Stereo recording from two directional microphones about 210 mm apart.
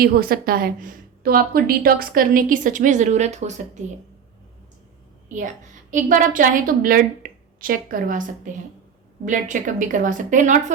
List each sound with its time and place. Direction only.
0.0 s a woman's voice: 45° right (ahead or behind)
5.9 s a woman's voice: 40° right (ahead or behind)
9.2 s a woman's voice: 35° right (ahead or behind)